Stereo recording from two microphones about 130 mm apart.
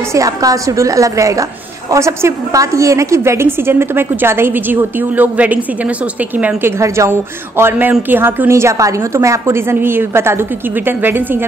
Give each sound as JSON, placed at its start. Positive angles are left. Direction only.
{"t": 0.1, "sound": "a woman's voice", "side_deg": -25}